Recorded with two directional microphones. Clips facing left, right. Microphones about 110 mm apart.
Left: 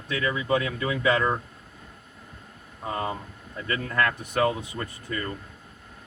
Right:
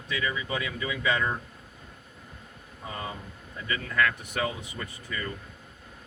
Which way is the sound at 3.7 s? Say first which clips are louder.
Left 2 dB; 40° left (ahead or behind).